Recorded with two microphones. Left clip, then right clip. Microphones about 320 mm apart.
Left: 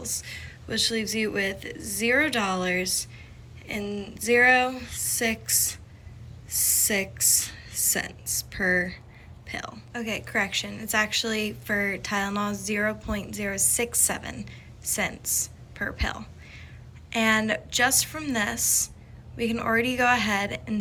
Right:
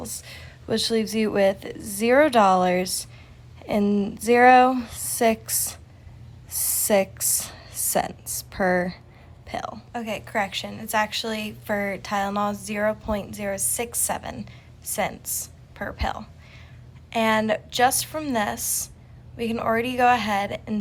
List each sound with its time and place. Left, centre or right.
0.0 s a woman's voice: centre